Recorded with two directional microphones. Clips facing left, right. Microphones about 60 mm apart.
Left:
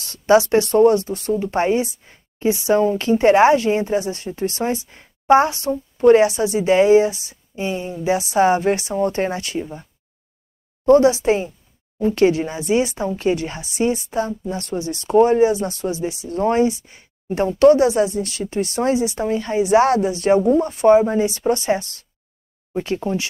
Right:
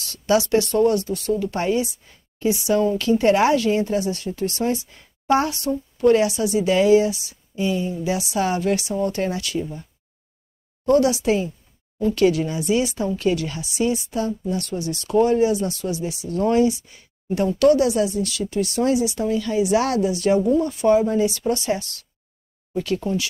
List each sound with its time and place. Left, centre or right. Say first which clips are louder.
0.0 s speech: left 5 dB; left
10.9 s speech: left 4 dB; left